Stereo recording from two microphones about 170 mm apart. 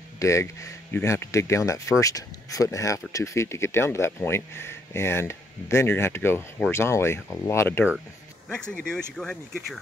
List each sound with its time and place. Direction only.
0.2 s speech: 15° left (ahead or behind)